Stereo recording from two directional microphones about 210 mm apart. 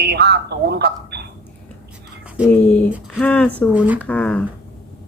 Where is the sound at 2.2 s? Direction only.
5° right (ahead or behind).